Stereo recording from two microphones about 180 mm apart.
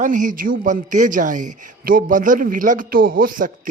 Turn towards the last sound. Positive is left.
turn(degrees=-50)  # may be behind; listen again after turning